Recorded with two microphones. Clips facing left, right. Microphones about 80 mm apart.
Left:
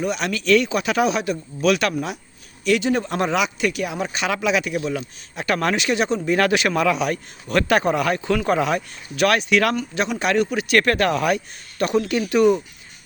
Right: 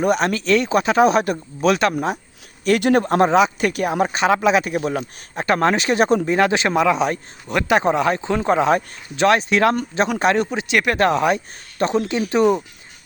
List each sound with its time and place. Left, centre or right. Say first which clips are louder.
0.0 s speech: right 5 dB; right
2.6 s speech: right 4 dB; right
6.2 s a man's voice: right 1 dB; right